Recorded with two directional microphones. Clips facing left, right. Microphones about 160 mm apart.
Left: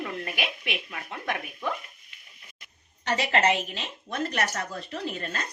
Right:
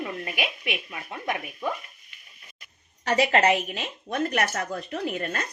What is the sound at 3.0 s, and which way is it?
Speech, 25° left (ahead or behind).